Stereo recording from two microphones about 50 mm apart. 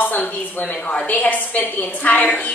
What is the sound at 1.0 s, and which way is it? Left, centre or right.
A woman's voice, left.